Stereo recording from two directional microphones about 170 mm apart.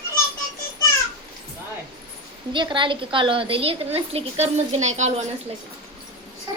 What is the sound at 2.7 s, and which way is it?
A woman's voice, 30° right (ahead or behind).